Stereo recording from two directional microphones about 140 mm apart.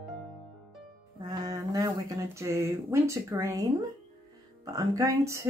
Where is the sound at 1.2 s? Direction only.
25° right (ahead or behind).